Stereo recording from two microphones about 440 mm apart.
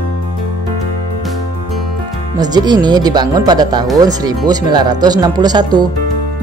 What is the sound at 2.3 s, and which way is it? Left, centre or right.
Speech, centre.